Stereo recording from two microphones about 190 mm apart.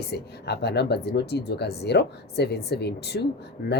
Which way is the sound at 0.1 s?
60° left (ahead or behind).